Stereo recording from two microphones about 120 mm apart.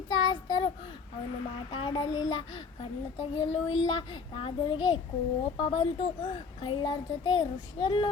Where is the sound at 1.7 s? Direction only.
45° left (ahead or behind).